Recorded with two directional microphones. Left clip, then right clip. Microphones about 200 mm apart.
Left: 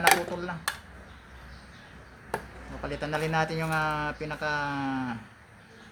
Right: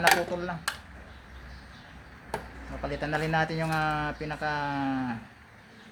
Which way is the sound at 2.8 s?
15° right (ahead or behind).